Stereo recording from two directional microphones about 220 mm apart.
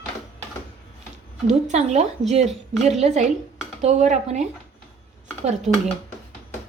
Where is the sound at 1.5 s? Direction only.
30° right (ahead or behind).